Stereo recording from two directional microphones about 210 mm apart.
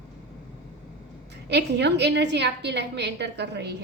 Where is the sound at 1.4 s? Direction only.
55° right (ahead or behind).